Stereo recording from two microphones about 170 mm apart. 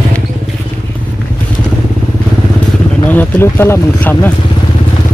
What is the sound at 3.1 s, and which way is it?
Speech, 10° left (ahead or behind).